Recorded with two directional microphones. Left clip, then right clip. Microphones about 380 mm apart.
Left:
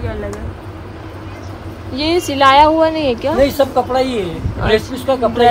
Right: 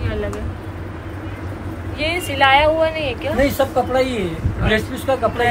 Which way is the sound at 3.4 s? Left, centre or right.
Left.